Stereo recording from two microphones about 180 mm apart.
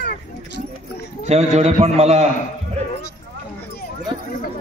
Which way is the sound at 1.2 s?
35° right (ahead or behind).